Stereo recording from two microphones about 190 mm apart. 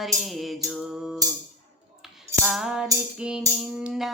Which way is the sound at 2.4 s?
Centre (ahead or behind).